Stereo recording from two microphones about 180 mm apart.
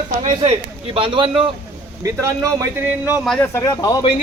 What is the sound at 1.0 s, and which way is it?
Speech, 30° right (ahead or behind).